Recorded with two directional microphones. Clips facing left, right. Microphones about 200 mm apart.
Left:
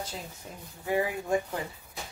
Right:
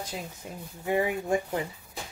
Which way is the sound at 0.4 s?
15° right (ahead or behind).